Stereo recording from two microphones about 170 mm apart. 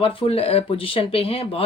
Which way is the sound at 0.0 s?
30° left (ahead or behind).